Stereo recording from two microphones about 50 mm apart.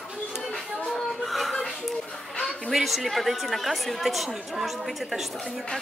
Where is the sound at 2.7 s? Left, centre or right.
Centre.